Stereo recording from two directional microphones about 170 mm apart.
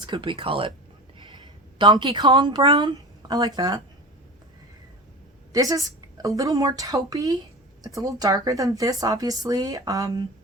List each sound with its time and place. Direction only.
0.0 s speech: 30° right (ahead or behind)
1.8 s speech: 25° right (ahead or behind)
5.5 s speech: 20° right (ahead or behind)